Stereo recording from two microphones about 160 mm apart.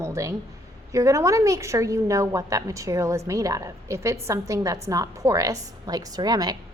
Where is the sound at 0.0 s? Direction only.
20° right (ahead or behind).